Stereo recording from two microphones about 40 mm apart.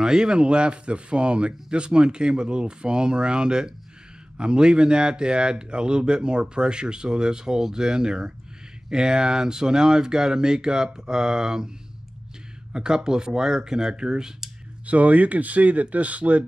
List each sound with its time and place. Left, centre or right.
0.0 s speech: centre
12.7 s speech: centre
14.9 s speech: right